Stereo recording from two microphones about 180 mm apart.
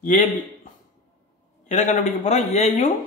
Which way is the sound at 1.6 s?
45° left (ahead or behind).